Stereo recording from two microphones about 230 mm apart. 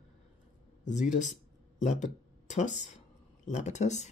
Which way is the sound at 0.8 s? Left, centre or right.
Left.